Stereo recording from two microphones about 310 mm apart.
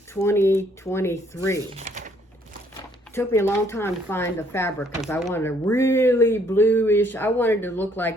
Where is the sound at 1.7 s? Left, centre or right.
Right.